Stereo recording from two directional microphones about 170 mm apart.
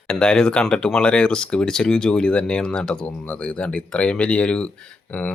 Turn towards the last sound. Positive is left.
turn(degrees=10)  # may be behind; listen again after turning